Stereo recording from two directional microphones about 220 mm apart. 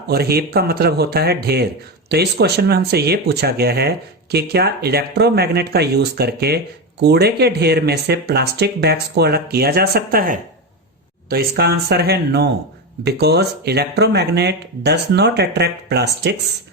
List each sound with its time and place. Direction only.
0.1 s speech: 45° right (ahead or behind)